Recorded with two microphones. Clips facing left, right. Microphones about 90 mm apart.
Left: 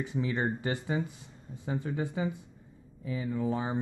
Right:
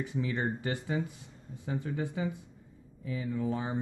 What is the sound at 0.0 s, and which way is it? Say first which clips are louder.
Speech: left 2 dB; 25° left (ahead or behind).